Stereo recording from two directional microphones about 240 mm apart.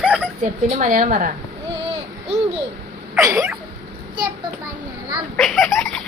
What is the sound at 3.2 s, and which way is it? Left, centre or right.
Cat, centre.